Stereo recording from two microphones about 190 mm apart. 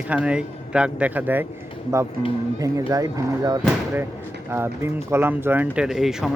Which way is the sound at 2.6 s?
15° right (ahead or behind).